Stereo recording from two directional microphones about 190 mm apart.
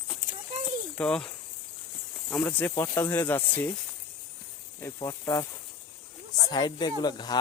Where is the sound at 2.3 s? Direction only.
10° left (ahead or behind).